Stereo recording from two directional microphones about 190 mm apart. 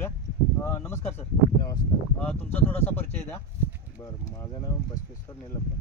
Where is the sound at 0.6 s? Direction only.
15° left (ahead or behind).